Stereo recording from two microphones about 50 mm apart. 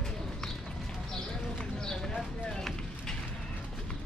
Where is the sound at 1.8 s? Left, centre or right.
Centre.